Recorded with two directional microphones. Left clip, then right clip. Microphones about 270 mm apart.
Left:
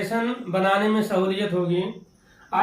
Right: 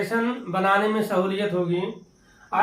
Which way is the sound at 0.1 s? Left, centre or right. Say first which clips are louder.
Even; centre.